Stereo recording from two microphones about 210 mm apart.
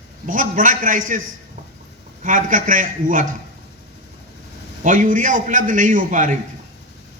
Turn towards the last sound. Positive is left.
turn(degrees=-40)  # may be behind; listen again after turning